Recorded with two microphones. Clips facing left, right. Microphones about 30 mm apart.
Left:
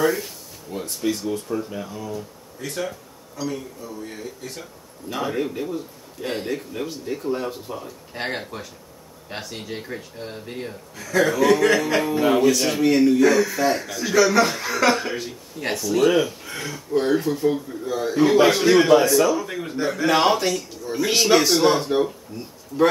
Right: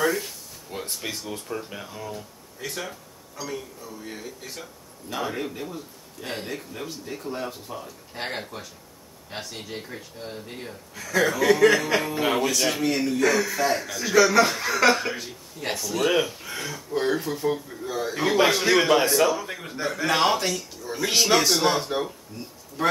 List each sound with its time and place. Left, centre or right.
0.0 s speech: centre
0.7 s a sound: centre
1.1 s speech: centre
19.0 s a man's voice: right
19.3 s speech: centre